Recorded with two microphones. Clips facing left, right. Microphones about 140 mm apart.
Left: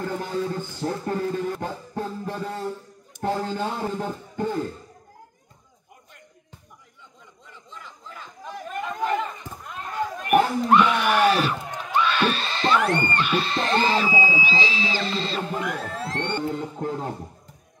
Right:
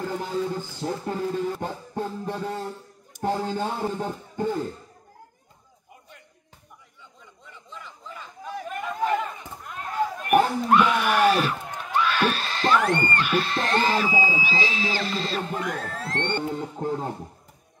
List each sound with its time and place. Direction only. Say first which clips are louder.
0.0 s speech: even; 10° right (ahead or behind)
8.5 s chatter: even; 5° right (ahead or behind)
10.3 s a sound: left 1 dB; 5° right (ahead or behind)
14.6 s speech: left 1 dB; 5° right (ahead or behind)
16.6 s speech: even; 15° right (ahead or behind)